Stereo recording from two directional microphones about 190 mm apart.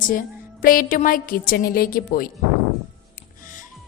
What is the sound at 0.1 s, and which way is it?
A woman's voice, 50° left (ahead or behind).